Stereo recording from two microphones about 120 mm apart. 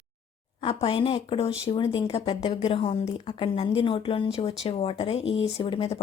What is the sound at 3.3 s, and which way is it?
Speech, 50° left (ahead or behind).